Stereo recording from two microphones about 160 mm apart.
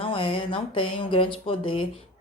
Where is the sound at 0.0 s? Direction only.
35° left (ahead or behind).